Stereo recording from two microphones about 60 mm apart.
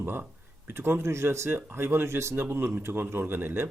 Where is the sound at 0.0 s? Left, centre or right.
Right.